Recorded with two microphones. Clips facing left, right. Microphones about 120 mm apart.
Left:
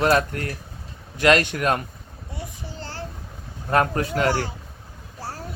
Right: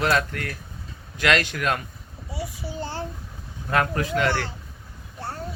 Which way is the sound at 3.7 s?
35° left (ahead or behind).